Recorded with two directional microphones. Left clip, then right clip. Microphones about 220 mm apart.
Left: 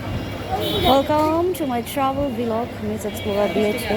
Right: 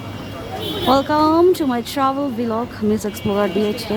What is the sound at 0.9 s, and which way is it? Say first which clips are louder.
A woman's voice: right 4 dB; 15° right (ahead or behind).